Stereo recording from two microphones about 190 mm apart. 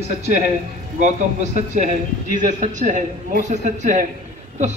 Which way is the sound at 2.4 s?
40° right (ahead or behind).